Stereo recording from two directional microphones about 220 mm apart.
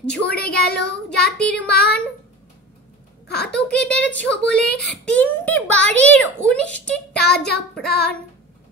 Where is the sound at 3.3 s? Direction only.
45° left (ahead or behind).